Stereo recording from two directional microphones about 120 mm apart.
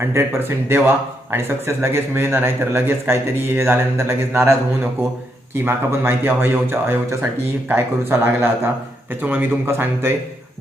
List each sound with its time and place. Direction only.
0.0 s speech: 20° right (ahead or behind)